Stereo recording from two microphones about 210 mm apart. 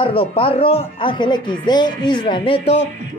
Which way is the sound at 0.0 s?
25° left (ahead or behind).